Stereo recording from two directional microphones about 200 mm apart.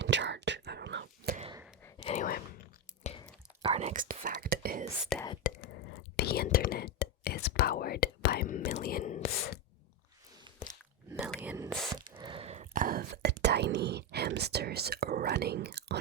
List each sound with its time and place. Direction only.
0.0 s whispering: 60° right (ahead or behind)
2.0 s a sound: 35° left (ahead or behind)
3.0 s a sound: 30° left (ahead or behind)
3.6 s whispering: 35° right (ahead or behind)
5.1 s speech: centre (ahead or behind)
5.5 s whispering: 55° left (ahead or behind)
11.3 s whispering: 15° right (ahead or behind)
12.1 s whispering: 25° right (ahead or behind); by 16.0 s 55° right (ahead or behind)